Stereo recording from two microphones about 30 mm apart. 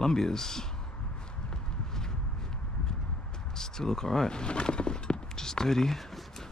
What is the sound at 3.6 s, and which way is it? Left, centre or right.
Speech, centre.